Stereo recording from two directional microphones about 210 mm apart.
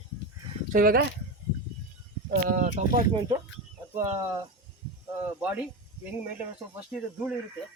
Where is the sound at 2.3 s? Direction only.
40° right (ahead or behind).